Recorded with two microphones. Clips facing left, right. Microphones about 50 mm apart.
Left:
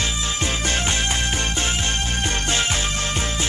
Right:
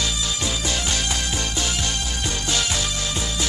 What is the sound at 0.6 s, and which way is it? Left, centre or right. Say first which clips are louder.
Music: left 4 dB; left.